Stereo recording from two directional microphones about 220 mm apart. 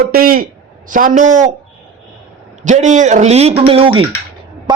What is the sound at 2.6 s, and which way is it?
A man's voice, 35° right (ahead or behind).